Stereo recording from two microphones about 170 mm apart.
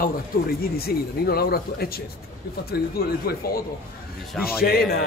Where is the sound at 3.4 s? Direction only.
65° left (ahead or behind).